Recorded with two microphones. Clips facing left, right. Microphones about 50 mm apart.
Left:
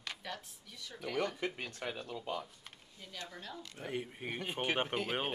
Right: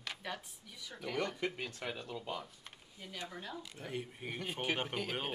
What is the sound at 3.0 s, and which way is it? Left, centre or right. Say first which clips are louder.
Speech: right 2 dB; centre.